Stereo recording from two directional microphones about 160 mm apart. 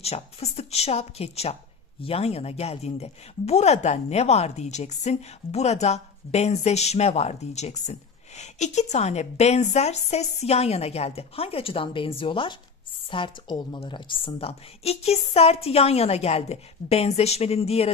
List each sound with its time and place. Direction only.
0.0 s speech: 40° left (ahead or behind)